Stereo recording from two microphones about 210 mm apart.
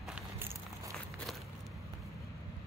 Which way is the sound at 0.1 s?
10° right (ahead or behind).